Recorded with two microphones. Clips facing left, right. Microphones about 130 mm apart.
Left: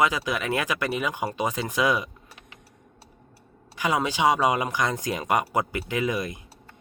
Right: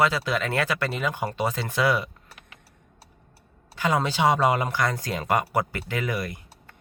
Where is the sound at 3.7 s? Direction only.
10° left (ahead or behind).